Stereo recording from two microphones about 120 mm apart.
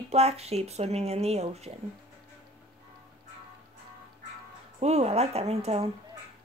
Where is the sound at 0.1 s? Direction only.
60° right (ahead or behind).